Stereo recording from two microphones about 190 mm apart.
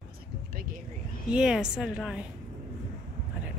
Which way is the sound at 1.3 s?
5° right (ahead or behind).